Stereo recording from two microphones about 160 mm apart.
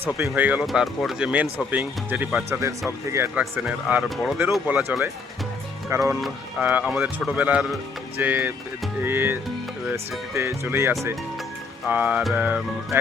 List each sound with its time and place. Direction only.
0.0 s speech: 15° right (ahead or behind)